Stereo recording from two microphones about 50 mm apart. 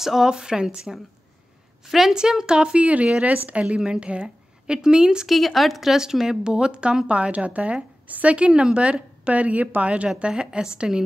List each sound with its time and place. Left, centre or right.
0.0 s a woman's voice: centre
1.9 s a woman's voice: centre
5.3 s a woman's voice: centre